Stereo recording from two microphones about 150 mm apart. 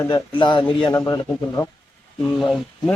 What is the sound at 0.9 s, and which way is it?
Speech, 20° left (ahead or behind).